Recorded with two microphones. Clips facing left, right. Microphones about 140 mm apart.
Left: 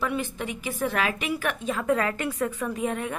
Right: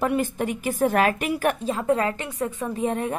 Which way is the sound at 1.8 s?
25° right (ahead or behind).